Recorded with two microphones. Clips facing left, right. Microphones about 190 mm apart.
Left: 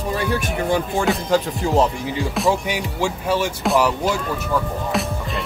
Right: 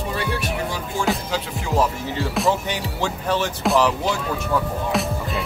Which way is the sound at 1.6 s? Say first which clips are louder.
Left 1 dB; 25° left (ahead or behind).